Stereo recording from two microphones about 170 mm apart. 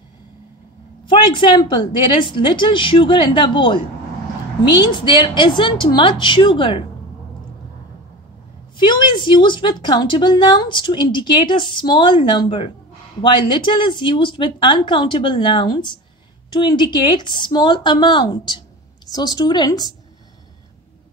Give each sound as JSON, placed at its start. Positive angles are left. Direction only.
{"t": 1.0, "sound": "a woman's voice", "side_deg": 30}
{"t": 4.8, "sound": "a woman's voice", "side_deg": 30}
{"t": 8.7, "sound": "a woman's voice", "side_deg": 30}